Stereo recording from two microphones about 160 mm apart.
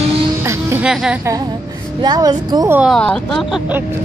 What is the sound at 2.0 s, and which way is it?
Speech, 25° right (ahead or behind).